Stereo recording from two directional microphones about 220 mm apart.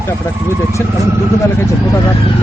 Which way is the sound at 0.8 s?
10° left (ahead or behind).